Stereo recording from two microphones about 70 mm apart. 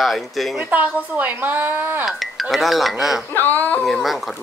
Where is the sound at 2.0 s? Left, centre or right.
Centre.